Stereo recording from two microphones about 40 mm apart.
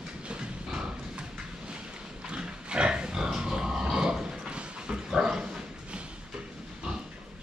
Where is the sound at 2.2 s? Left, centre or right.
Right.